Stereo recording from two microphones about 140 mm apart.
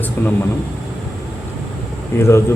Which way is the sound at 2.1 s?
20° left (ahead or behind).